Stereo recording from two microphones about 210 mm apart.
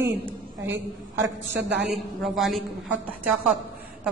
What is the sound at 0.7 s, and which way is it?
Speech, 60° right (ahead or behind).